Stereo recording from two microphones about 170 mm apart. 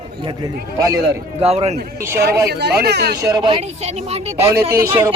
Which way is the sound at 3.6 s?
40° right (ahead or behind).